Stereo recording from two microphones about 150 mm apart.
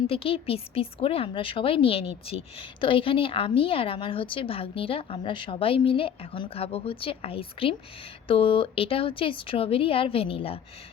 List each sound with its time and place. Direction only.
0.1 s speech: 40° left (ahead or behind)